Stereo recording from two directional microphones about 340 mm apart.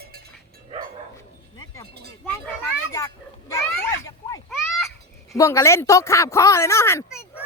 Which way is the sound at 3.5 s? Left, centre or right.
Centre.